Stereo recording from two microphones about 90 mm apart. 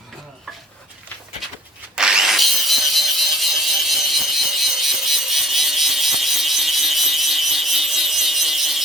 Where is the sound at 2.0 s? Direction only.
5° right (ahead or behind).